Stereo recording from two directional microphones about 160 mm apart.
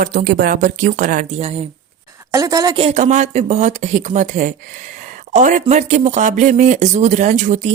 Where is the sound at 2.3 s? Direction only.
20° right (ahead or behind).